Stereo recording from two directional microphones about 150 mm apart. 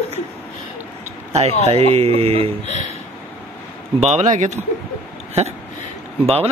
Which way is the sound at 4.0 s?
50° right (ahead or behind).